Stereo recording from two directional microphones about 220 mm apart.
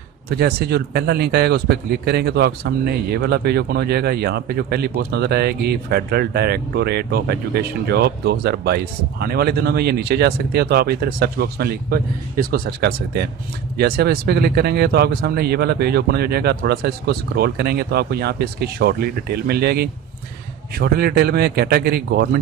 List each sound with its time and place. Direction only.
0.3 s a man's voice: 45° right (ahead or behind)